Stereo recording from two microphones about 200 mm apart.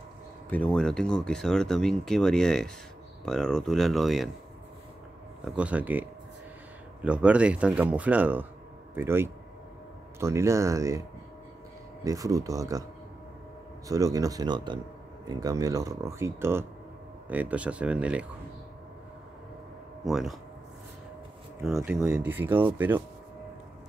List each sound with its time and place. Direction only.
0.5 s speech: 5° left (ahead or behind)
5.4 s speech: 5° right (ahead or behind)
12.0 s speech: 15° right (ahead or behind)
13.8 s speech: 15° right (ahead or behind)
20.1 s speech: centre (ahead or behind)
21.6 s speech: centre (ahead or behind)